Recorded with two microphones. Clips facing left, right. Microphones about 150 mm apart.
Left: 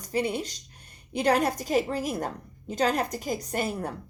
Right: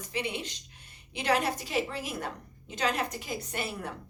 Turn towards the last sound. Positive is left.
turn(degrees=40)  # may be behind; listen again after turning